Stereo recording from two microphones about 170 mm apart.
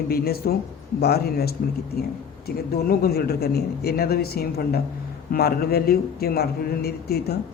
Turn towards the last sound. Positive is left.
turn(degrees=65)  # may be behind; listen again after turning